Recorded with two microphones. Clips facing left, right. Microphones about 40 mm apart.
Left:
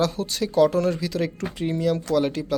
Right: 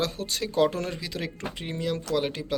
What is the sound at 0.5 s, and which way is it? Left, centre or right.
Speech, right.